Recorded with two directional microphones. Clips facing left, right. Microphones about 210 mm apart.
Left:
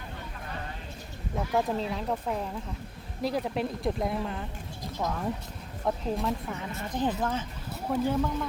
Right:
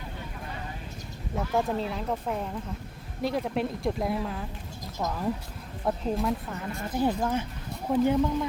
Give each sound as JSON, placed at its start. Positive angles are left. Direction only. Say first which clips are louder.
{"t": 1.4, "sound": "a woman's voice", "louder": "right 1 dB", "side_deg": 0}